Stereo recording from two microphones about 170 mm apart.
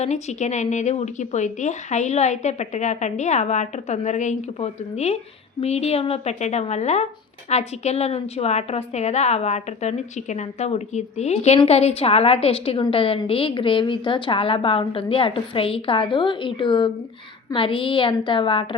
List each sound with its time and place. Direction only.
0.0 s a woman's voice: 40° left (ahead or behind)